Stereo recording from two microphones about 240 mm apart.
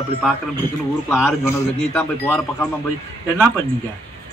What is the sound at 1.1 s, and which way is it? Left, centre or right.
Speech, centre.